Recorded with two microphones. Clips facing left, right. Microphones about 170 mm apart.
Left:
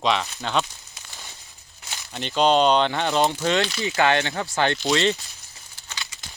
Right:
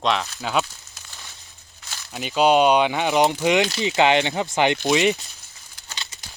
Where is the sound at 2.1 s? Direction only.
5° right (ahead or behind).